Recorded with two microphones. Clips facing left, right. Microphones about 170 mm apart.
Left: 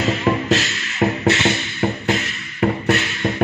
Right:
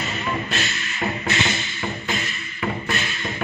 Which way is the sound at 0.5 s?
75° left (ahead or behind).